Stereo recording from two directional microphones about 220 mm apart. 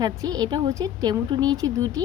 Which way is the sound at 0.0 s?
15° right (ahead or behind).